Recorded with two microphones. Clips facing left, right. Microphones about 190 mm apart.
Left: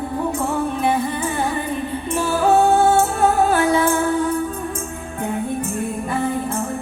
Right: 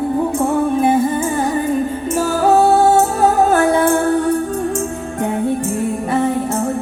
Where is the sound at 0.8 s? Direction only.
45° right (ahead or behind); by 6.1 s 75° right (ahead or behind).